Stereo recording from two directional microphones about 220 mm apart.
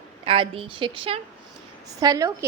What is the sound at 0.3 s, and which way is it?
A woman's voice, 25° right (ahead or behind).